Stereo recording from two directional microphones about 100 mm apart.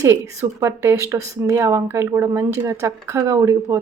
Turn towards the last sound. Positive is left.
turn(degrees=-30)  # may be behind; listen again after turning